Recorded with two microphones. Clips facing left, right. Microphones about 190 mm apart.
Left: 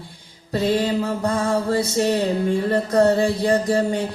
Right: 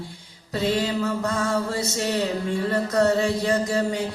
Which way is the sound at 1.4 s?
30° left (ahead or behind).